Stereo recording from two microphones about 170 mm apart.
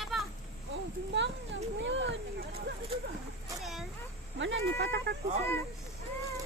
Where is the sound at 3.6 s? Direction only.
Centre (ahead or behind).